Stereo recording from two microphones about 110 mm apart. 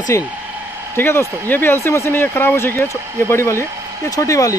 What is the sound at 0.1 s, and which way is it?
Speech, 25° left (ahead or behind).